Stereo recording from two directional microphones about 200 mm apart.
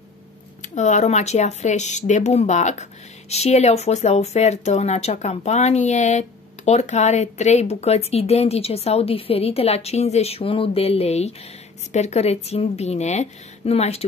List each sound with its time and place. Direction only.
0.7 s speech: 35° left (ahead or behind)